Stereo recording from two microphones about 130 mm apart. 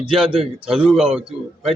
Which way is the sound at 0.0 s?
40° right (ahead or behind).